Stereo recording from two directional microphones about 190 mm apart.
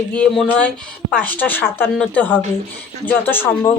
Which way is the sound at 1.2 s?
10° left (ahead or behind).